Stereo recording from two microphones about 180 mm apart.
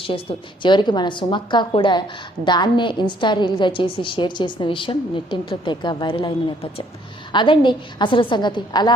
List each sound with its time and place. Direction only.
0.0 s a woman's voice: 30° left (ahead or behind)